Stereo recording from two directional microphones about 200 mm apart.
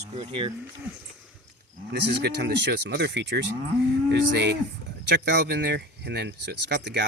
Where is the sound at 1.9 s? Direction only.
55° right (ahead or behind).